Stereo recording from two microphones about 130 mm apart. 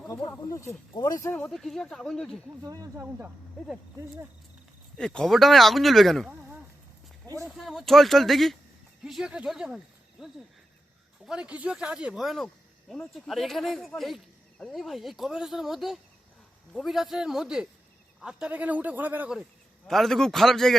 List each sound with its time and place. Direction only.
0.3 s speech: 20° left (ahead or behind)
1.3 s speech: 5° left (ahead or behind)
2.6 s speech: 25° right (ahead or behind)
3.0 s a man's voice: 15° right (ahead or behind)
4.9 s speech: 5° left (ahead or behind)
7.4 s speech: centre (ahead or behind)
11.3 s a man's voice: 10° right (ahead or behind)
19.9 s speech: centre (ahead or behind)